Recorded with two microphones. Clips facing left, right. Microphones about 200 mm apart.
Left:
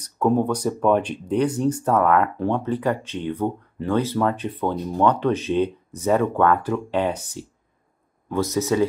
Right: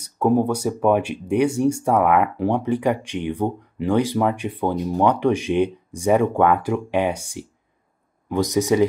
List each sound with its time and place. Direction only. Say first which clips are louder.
0.0 s speech: right 2 dB; 10° right (ahead or behind)